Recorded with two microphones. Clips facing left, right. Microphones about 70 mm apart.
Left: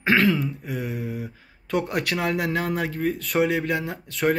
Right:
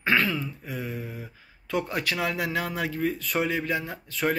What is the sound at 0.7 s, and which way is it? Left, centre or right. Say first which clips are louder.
Speech: left 5 dB; left.